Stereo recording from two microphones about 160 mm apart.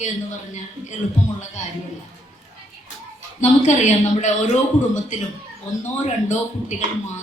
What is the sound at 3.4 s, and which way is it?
Speech, 45° left (ahead or behind).